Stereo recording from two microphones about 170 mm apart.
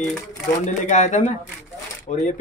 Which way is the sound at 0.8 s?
45° left (ahead or behind).